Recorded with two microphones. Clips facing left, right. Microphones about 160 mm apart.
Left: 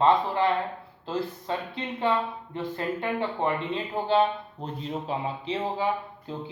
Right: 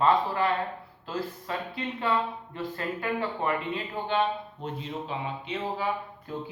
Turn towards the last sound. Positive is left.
turn(degrees=25)  # may be behind; listen again after turning